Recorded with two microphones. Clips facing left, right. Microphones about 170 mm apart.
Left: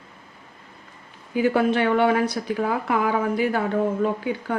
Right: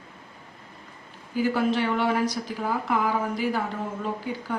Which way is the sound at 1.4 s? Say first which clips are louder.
Left 4 dB; 60° left (ahead or behind).